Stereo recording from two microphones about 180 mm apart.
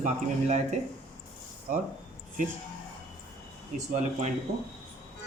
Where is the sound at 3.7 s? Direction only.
40° right (ahead or behind).